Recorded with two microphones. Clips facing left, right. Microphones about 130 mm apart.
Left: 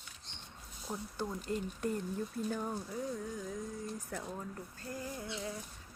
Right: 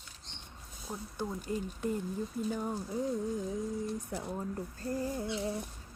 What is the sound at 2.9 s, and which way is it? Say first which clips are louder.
Speech: right 6 dB; 30° right (ahead or behind).